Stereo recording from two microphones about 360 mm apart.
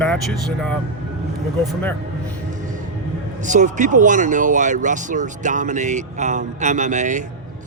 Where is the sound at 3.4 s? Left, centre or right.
Centre.